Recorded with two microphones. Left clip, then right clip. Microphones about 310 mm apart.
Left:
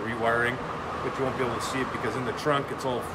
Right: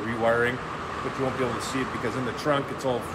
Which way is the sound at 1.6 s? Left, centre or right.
Centre.